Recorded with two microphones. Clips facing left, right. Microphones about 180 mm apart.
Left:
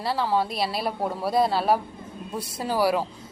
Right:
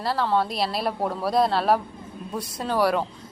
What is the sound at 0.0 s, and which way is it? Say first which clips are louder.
A woman's voice: right 1 dB; centre (ahead or behind).